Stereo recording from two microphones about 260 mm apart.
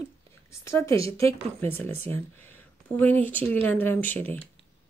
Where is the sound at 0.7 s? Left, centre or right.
Centre.